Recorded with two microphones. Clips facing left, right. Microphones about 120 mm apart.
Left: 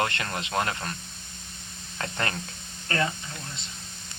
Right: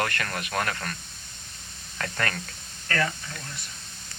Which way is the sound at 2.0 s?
25° left (ahead or behind).